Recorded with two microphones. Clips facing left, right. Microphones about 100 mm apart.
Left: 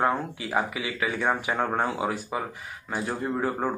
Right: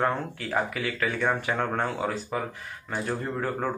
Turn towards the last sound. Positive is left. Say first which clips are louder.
# left 2 dB
turn(degrees=15)  # may be behind; listen again after turning